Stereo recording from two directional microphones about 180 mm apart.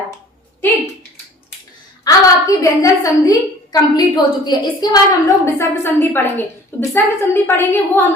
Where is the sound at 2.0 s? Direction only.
20° left (ahead or behind).